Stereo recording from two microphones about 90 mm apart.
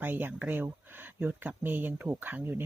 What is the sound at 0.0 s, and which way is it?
Speech, 20° right (ahead or behind).